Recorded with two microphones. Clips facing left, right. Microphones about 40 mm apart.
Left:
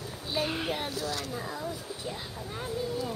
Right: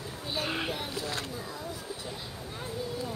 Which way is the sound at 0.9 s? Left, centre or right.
Right.